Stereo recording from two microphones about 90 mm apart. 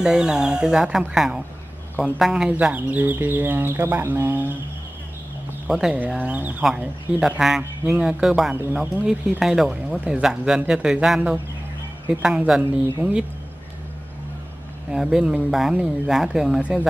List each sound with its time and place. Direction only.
0.0 s speech: 10° right (ahead or behind)
2.5 s speech: 15° right (ahead or behind)
5.7 s speech: 5° right (ahead or behind)
6.1 s speech: 15° right (ahead or behind)
6.8 s speech: 5° right (ahead or behind)
15.0 s speech: 5° right (ahead or behind)